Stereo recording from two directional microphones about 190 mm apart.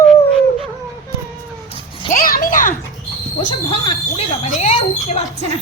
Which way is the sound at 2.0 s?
50° left (ahead or behind).